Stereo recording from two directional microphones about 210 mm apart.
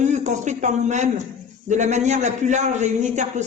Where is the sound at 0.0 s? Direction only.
35° right (ahead or behind).